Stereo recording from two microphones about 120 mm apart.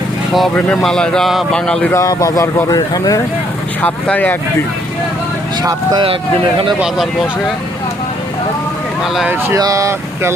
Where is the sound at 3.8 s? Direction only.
15° left (ahead or behind).